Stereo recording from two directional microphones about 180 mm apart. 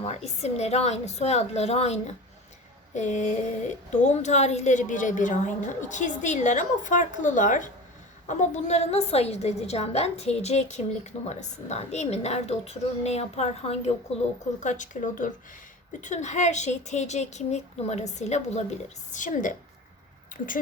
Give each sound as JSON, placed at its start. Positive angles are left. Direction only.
{"t": 0.0, "sound": "a woman's voice", "side_deg": 35}